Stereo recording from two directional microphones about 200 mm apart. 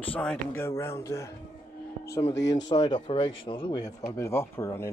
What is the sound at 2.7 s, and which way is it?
Speech, 25° left (ahead or behind).